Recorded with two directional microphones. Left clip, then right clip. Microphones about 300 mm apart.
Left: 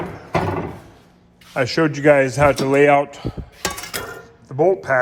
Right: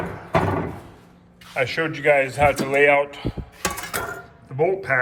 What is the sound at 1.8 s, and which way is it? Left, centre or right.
A man's voice, left.